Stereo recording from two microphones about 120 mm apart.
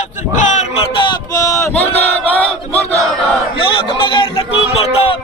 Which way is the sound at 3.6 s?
45° left (ahead or behind).